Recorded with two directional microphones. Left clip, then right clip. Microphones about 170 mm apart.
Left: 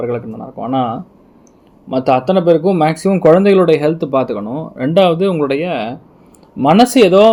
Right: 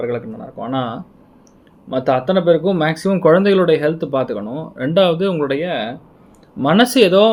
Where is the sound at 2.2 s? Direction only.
15° left (ahead or behind).